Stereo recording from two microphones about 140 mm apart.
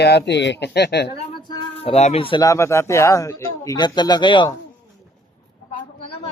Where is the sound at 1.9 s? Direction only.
50° left (ahead or behind).